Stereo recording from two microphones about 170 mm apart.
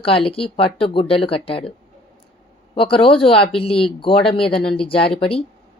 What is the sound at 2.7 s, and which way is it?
Speech, 30° left (ahead or behind).